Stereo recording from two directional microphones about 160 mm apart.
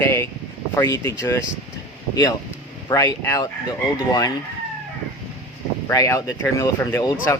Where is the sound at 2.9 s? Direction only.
20° left (ahead or behind).